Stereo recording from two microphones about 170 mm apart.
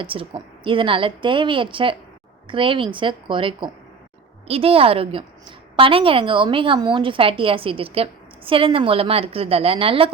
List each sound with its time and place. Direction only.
0.0 s a woman's voice: 30° right (ahead or behind)